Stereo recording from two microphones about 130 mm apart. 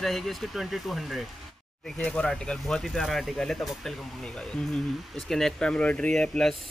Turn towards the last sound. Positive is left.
turn(degrees=5)  # may be behind; listen again after turning